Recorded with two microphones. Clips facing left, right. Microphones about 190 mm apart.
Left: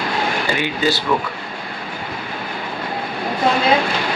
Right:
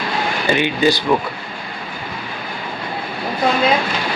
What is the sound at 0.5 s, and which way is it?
Speech, 20° right (ahead or behind).